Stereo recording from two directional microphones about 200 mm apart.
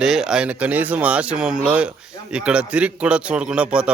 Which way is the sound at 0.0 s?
Centre (ahead or behind).